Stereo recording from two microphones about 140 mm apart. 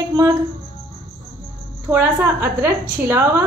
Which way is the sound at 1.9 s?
15° right (ahead or behind).